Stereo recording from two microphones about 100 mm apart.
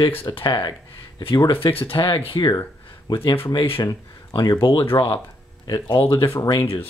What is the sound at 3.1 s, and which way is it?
Speech, 45° left (ahead or behind).